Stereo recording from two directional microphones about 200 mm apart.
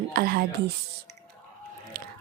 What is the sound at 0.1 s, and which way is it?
Speech, 50° right (ahead or behind).